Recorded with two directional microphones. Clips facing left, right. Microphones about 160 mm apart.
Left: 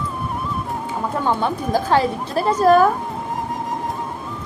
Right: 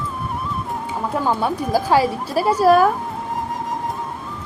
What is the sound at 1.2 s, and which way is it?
A woman's voice, 5° right (ahead or behind).